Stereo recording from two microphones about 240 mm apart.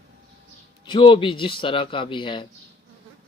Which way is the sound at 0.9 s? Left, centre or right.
Centre.